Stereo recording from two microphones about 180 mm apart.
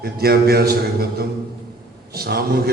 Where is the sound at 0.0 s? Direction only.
60° right (ahead or behind).